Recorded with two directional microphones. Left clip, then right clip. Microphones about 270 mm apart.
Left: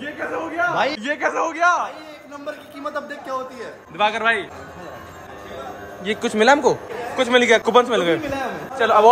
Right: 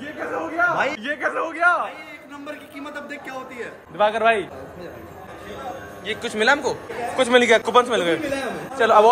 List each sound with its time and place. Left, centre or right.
0.0 s a sound: centre
0.7 s a man's voice: centre
2.8 s a man's voice: centre
4.0 s a man's voice: centre
6.0 s a man's voice: left